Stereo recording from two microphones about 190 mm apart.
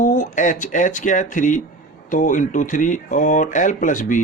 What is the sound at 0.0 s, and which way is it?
A man's voice, 40° left (ahead or behind).